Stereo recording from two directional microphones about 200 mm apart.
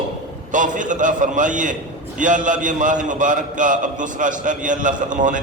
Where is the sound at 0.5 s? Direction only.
40° right (ahead or behind).